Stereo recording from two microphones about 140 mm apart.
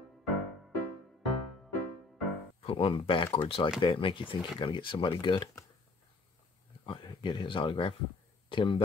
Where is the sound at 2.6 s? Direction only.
40° left (ahead or behind).